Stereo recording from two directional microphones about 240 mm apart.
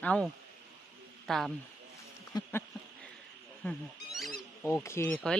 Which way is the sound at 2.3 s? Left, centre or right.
Centre.